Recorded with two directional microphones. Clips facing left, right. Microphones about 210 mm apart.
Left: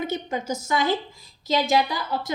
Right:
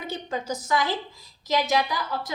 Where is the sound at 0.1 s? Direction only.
20° left (ahead or behind).